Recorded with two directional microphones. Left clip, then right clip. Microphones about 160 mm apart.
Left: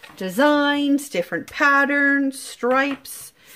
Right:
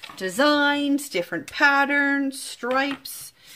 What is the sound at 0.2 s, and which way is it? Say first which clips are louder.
Speech: left 2 dB; 35° left (ahead or behind).